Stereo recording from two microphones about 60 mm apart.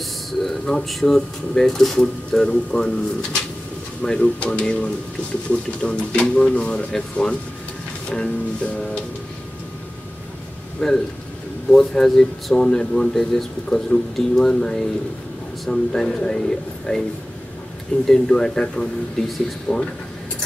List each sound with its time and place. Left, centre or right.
0.0 s speech: centre
10.8 s speech: centre
18.0 s speech: centre